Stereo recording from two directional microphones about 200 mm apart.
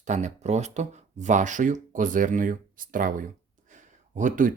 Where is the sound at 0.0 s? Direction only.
35° right (ahead or behind).